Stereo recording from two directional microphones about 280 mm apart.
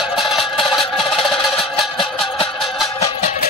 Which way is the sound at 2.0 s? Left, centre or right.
Centre.